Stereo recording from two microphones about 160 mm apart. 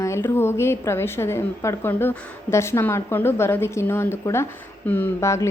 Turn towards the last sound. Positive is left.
turn(degrees=20)  # may be behind; listen again after turning